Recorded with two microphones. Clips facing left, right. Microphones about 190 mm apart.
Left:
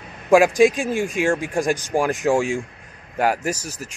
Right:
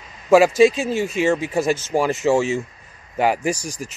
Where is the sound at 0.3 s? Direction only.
15° left (ahead or behind).